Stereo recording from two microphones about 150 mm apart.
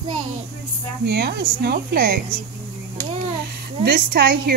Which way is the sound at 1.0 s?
90° right.